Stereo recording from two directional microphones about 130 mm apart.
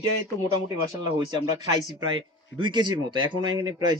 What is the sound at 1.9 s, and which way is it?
Speech, 35° right (ahead or behind).